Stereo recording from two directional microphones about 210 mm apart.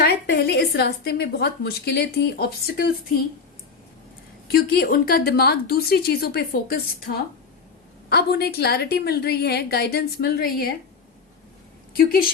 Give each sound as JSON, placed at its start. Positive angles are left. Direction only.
{"t": 0.0, "sound": "a woman's voice", "side_deg": 50}
{"t": 4.4, "sound": "a woman's voice", "side_deg": 45}
{"t": 8.1, "sound": "a woman's voice", "side_deg": 50}
{"t": 11.9, "sound": "a woman's voice", "side_deg": 45}